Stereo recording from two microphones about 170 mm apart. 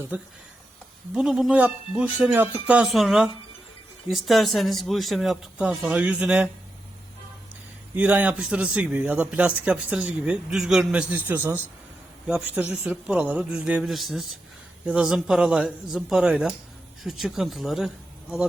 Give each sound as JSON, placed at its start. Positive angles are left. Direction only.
{"t": 1.1, "sound": "speech", "side_deg": 0}
{"t": 7.9, "sound": "a man's voice", "side_deg": -10}